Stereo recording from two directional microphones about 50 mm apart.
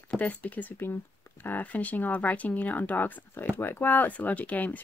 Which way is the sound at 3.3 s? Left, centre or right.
Left.